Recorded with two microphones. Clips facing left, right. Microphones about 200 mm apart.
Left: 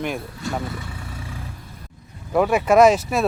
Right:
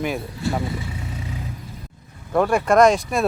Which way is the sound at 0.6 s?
20° right (ahead or behind).